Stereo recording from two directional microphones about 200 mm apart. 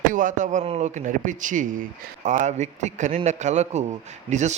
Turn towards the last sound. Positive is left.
turn(degrees=-35)  # may be behind; listen again after turning